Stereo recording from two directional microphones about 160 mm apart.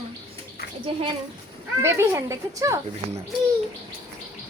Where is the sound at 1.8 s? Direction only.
15° right (ahead or behind).